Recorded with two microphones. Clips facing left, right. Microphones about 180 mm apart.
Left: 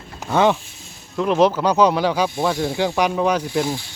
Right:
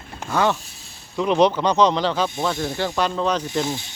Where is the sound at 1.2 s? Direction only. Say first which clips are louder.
Left 1 dB; centre (ahead or behind).